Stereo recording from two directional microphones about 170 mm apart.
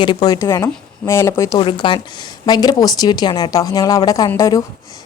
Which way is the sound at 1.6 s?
30° left (ahead or behind).